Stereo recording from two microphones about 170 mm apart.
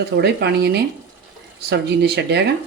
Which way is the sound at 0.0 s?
75° right (ahead or behind).